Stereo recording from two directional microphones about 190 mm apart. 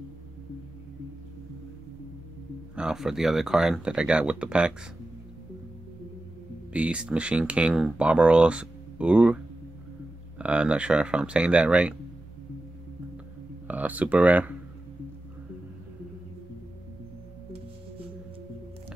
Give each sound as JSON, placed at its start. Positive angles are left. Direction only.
{"t": 2.7, "sound": "speech", "side_deg": -5}
{"t": 6.7, "sound": "speech", "side_deg": -5}
{"t": 10.4, "sound": "speech", "side_deg": -5}
{"t": 13.7, "sound": "speech", "side_deg": -10}